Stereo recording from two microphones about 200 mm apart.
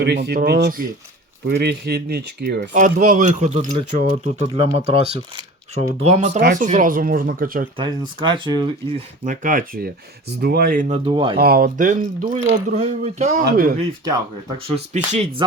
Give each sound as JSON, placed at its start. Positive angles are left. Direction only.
{"t": 0.0, "sound": "speech", "side_deg": -60}
{"t": 2.6, "sound": "speech", "side_deg": -40}
{"t": 6.4, "sound": "speech", "side_deg": -55}
{"t": 6.7, "sound": "speech", "side_deg": -40}
{"t": 7.8, "sound": "speech", "side_deg": -25}
{"t": 9.2, "sound": "speech", "side_deg": -40}
{"t": 11.3, "sound": "speech", "side_deg": -50}
{"t": 13.4, "sound": "speech", "side_deg": -45}
{"t": 14.9, "sound": "speech", "side_deg": -35}